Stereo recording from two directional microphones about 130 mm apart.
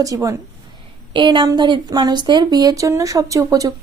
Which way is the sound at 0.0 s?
25° right (ahead or behind).